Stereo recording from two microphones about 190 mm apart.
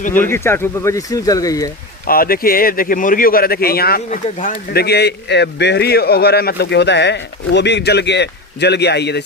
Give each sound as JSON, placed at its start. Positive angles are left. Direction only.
{"t": 0.2, "sound": "speech", "side_deg": 15}
{"t": 2.0, "sound": "a man's voice", "side_deg": 50}